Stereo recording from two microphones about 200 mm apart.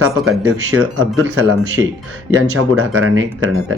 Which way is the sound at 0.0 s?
90° right.